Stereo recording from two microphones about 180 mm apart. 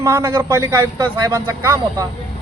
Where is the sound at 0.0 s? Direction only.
15° right (ahead or behind).